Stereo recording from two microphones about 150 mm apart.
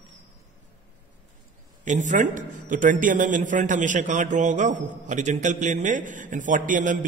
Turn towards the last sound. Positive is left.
turn(degrees=-60)  # may be behind; listen again after turning